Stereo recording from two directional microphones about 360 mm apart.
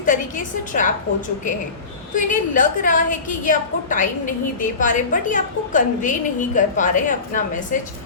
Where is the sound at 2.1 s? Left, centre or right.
Left.